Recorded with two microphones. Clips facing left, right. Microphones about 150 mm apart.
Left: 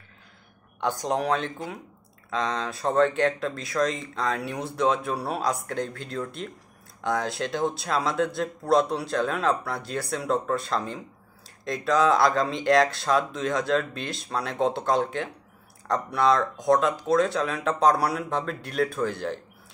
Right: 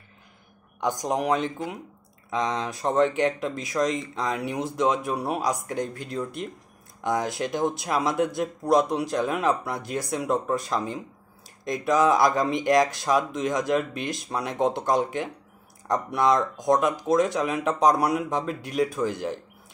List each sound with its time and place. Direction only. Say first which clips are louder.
0.7 s speech: even; 15° right (ahead or behind)